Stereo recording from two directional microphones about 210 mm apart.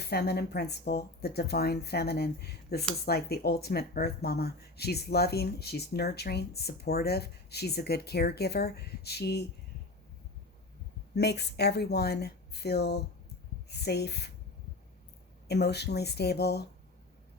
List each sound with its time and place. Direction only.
0.0 s speech: 50° left (ahead or behind)
11.1 s speech: 50° left (ahead or behind)
15.4 s speech: 50° left (ahead or behind)